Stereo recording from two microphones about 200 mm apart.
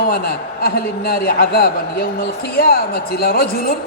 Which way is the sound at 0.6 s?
50° left (ahead or behind).